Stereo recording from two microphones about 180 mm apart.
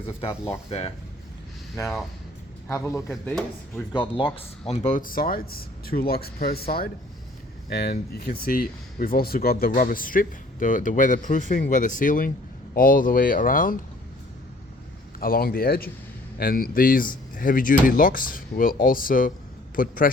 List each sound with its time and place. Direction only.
0.2 s speech: 30° left (ahead or behind)
2.6 s a man's voice: 15° left (ahead or behind)
4.4 s speech: 35° left (ahead or behind); by 6.5 s 60° left (ahead or behind)
7.7 s speech: 60° left (ahead or behind)
15.2 s speech: 55° left (ahead or behind)